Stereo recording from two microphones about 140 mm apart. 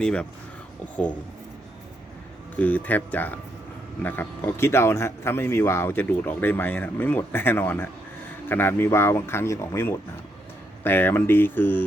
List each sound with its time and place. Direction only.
0.0 s speech: 5° left (ahead or behind)
2.6 s speech: 10° left (ahead or behind)